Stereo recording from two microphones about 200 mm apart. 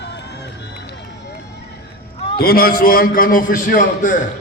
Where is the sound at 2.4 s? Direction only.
50° left (ahead or behind).